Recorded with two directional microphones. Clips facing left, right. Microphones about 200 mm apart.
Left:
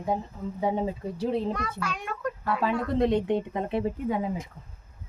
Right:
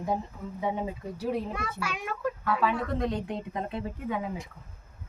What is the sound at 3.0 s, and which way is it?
Speech, 25° left (ahead or behind).